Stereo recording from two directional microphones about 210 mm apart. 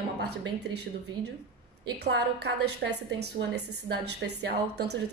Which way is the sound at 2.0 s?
50° right (ahead or behind).